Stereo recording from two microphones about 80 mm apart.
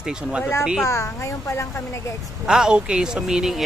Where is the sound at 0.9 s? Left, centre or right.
Left.